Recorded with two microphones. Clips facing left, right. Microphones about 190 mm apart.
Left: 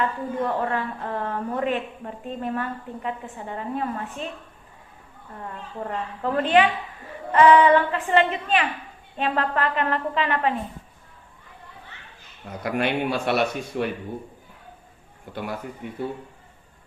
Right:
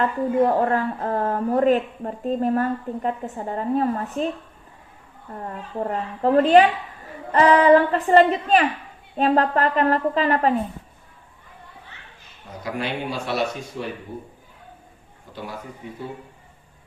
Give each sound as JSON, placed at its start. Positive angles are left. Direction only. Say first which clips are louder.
{"t": 0.4, "sound": "a woman's voice", "louder": "right 6 dB", "side_deg": -40}
{"t": 5.4, "sound": "a woman's voice", "louder": "right 5 dB", "side_deg": -35}
{"t": 12.6, "sound": "speech", "louder": "left 3 dB", "side_deg": 60}